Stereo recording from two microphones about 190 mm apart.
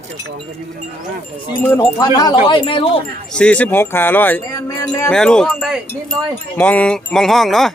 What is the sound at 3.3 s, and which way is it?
Speech, 5° left (ahead or behind).